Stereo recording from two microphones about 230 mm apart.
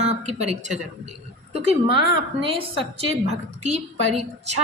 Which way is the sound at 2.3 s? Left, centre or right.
Right.